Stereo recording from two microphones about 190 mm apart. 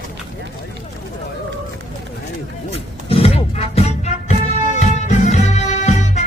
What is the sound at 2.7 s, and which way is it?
Music, 30° left (ahead or behind).